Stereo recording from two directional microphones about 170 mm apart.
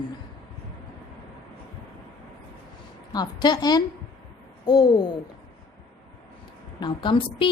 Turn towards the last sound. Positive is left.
turn(degrees=30)  # may be behind; listen again after turning